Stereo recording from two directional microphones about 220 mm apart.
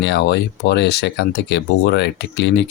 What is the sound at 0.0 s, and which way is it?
Speech, 50° left (ahead or behind).